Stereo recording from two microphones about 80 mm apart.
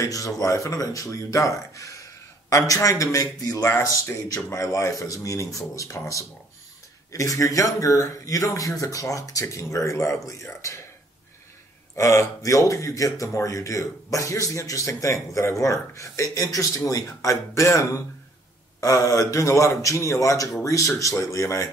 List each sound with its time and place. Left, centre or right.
0.0 s speech: left
7.1 s speech: left
11.9 s speech: left